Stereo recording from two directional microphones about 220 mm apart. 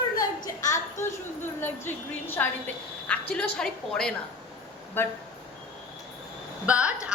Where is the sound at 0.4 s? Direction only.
15° left (ahead or behind).